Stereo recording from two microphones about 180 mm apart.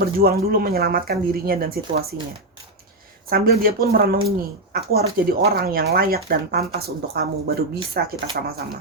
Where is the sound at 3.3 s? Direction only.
55° right (ahead or behind).